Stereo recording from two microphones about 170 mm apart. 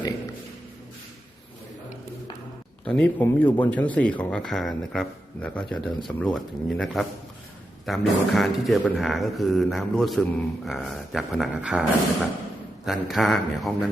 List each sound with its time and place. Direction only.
2.8 s speech: 5° left (ahead or behind)